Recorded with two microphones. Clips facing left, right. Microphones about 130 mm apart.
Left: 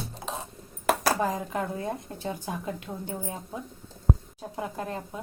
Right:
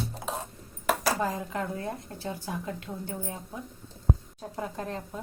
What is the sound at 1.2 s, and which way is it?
A woman's voice, 15° left (ahead or behind).